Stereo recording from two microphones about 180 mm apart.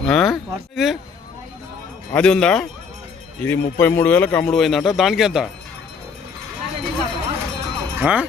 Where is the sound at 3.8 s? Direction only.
10° left (ahead or behind).